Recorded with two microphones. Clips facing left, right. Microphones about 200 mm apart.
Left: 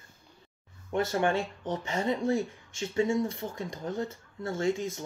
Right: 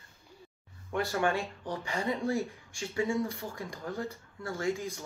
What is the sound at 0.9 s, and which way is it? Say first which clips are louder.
Speech: left 3 dB; 20° left (ahead or behind).